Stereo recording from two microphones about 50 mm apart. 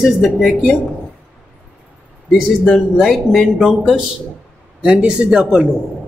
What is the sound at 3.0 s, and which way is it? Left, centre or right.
Speech, centre.